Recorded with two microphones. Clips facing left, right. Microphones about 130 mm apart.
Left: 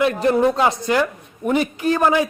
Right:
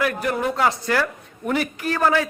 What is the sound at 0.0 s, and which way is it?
A man's voice, 25° left (ahead or behind).